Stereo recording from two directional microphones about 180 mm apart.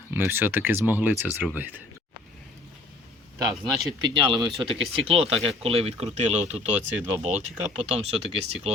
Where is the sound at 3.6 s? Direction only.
Centre (ahead or behind).